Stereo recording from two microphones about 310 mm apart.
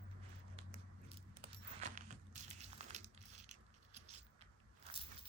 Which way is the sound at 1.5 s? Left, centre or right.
Right.